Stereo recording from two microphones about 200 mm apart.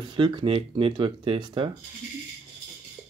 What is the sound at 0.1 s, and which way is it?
Speech, 25° right (ahead or behind).